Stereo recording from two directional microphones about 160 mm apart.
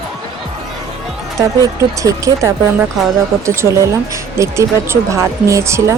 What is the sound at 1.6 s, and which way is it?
A woman's voice, 20° right (ahead or behind).